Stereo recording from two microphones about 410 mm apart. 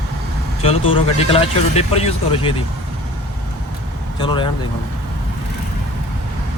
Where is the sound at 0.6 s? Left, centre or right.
Centre.